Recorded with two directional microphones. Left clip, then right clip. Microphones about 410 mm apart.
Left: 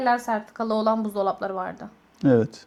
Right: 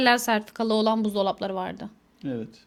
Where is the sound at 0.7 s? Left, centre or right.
Right.